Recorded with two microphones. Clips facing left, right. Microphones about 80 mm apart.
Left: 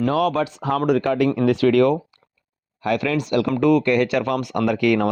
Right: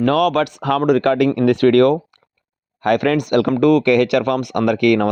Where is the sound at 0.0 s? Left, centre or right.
Right.